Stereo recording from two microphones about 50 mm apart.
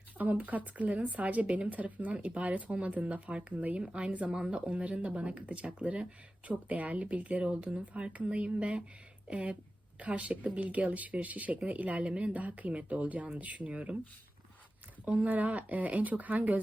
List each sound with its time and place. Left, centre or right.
0.2 s speech: right; by 4.5 s centre
4.5 s speech: right
15.0 s speech: right